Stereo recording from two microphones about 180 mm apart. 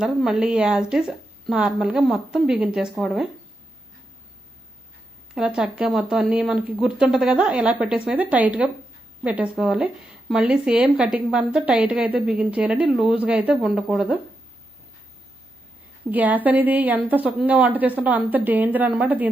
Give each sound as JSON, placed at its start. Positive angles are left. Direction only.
{"t": 0.0, "sound": "a woman's voice", "side_deg": 0}
{"t": 5.3, "sound": "a woman's voice", "side_deg": -5}
{"t": 16.0, "sound": "a woman's voice", "side_deg": -10}